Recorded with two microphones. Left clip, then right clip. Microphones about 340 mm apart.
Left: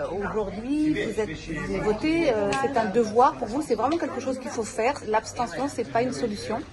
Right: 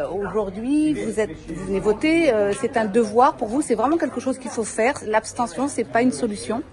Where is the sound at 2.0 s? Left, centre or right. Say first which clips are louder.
Right 6 dB; right.